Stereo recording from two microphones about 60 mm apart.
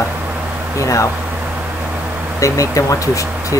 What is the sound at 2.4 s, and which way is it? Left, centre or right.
Speech, left.